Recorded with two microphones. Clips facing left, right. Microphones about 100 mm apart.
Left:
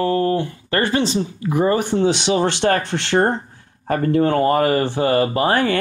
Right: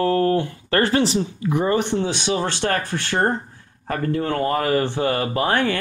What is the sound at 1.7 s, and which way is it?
Speech, 45° left (ahead or behind).